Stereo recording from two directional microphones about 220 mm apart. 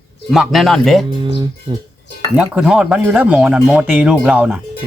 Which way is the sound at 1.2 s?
20° right (ahead or behind).